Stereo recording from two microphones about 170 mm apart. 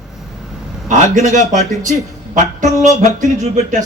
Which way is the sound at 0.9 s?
45° right (ahead or behind).